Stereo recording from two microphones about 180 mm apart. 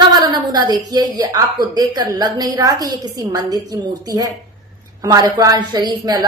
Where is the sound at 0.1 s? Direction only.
20° right (ahead or behind).